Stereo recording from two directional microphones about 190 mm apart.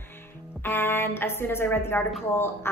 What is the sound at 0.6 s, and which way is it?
Speech, 10° left (ahead or behind).